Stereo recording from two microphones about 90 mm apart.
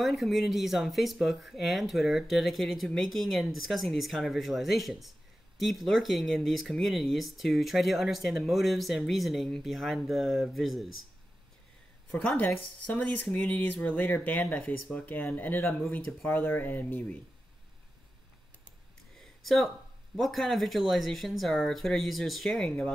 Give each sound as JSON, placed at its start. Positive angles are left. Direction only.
{"t": 0.0, "sound": "speech", "side_deg": 0}
{"t": 12.1, "sound": "speech", "side_deg": 15}
{"t": 19.1, "sound": "a sound", "side_deg": 0}
{"t": 20.2, "sound": "speech", "side_deg": 0}